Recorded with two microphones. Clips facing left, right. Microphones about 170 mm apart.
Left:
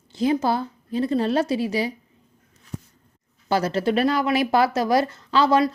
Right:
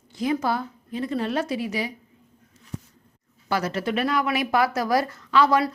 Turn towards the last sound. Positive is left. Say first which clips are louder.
# left 1 dB
turn(degrees=25)  # may be behind; listen again after turning